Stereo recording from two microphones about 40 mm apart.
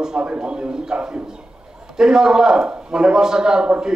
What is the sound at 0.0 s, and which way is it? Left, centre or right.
A man's voice, centre.